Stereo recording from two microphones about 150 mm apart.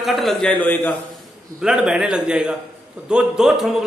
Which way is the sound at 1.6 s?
5° right (ahead or behind).